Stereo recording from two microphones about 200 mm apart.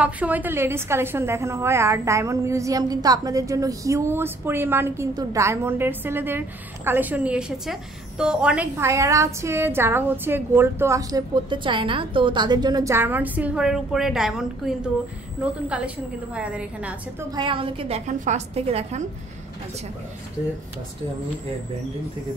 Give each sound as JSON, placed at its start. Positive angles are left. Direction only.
{"t": 0.0, "sound": "a woman's voice", "side_deg": -5}
{"t": 16.3, "sound": "a woman's voice", "side_deg": -5}
{"t": 17.4, "sound": "a woman's voice", "side_deg": -25}